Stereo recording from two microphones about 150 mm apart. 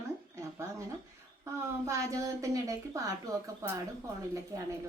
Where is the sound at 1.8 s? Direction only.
20° right (ahead or behind).